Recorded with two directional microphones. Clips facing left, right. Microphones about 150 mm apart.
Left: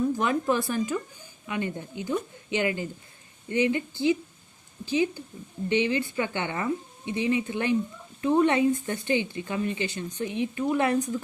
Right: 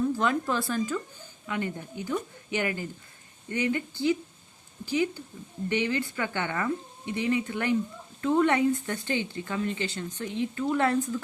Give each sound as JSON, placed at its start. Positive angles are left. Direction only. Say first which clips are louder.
{"t": 0.2, "sound": "speech", "louder": "left 2 dB", "side_deg": 15}
{"t": 5.6, "sound": "speech", "louder": "left 3 dB", "side_deg": 20}